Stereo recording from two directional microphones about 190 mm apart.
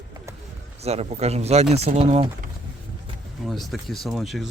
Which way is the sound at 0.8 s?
35° right (ahead or behind).